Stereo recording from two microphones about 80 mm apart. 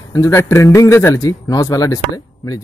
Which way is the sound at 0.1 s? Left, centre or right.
Left.